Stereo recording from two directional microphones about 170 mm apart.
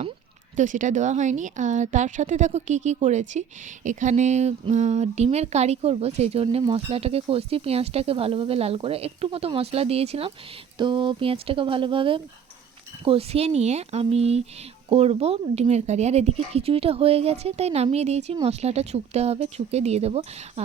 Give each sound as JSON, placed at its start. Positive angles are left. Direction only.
{"t": 0.5, "sound": "speech", "side_deg": -50}